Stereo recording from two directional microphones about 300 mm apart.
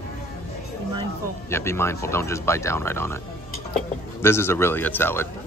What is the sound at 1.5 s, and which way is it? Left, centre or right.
Speech, centre.